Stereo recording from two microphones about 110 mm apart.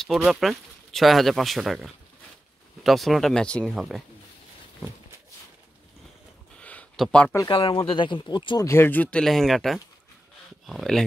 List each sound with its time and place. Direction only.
0.0 s speech: centre (ahead or behind)
6.6 s a sound: 10° left (ahead or behind)
7.5 s speech: 55° left (ahead or behind)
8.6 s speech: 20° left (ahead or behind)
9.2 s speech: centre (ahead or behind)